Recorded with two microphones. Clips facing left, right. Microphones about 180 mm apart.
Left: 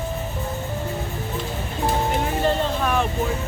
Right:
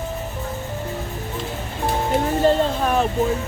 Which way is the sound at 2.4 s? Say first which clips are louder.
Right 4 dB; 35° right (ahead or behind).